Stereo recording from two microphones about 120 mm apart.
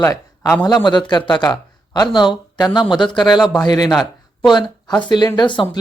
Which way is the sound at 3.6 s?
35° left (ahead or behind).